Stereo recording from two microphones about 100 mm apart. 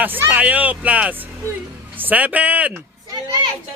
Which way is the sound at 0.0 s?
20° right (ahead or behind).